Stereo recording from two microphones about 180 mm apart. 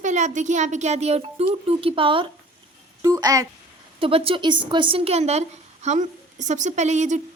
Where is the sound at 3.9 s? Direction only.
30° right (ahead or behind).